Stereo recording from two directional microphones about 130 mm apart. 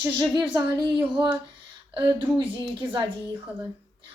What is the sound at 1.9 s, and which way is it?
Speech, 40° right (ahead or behind).